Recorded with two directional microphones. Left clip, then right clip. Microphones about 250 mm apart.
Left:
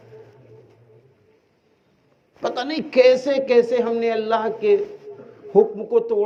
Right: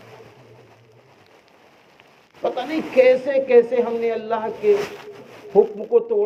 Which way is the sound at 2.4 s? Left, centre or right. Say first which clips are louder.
Right 1 dB; left.